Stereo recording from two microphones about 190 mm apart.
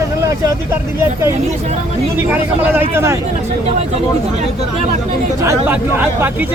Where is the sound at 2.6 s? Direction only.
10° right (ahead or behind).